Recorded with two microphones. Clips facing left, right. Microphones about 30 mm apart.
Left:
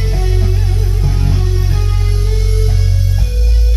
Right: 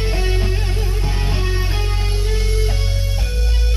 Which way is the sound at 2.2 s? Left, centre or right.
Centre.